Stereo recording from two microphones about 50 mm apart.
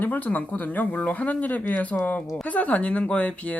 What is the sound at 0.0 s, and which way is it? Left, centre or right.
Speech, left.